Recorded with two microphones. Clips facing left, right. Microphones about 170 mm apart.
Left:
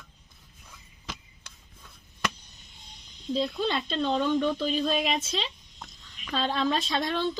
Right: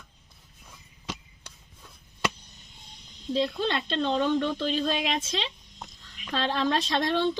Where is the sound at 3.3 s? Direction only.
5° left (ahead or behind).